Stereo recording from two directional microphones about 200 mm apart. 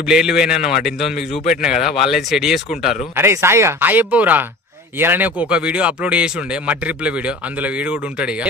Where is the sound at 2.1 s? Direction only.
Centre (ahead or behind).